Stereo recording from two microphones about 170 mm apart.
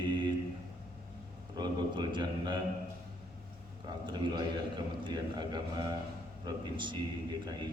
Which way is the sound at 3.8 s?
25° right (ahead or behind).